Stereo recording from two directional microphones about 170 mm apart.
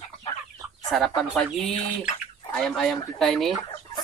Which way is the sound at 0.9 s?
5° left (ahead or behind).